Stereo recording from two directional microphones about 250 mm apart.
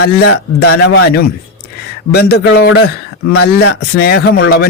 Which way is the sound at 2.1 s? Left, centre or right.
Left.